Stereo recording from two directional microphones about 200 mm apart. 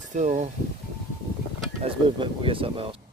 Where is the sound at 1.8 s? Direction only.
25° right (ahead or behind).